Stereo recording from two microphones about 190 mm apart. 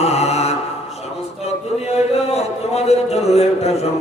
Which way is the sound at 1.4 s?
35° left (ahead or behind).